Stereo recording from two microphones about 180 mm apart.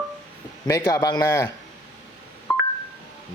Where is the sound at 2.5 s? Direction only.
15° left (ahead or behind).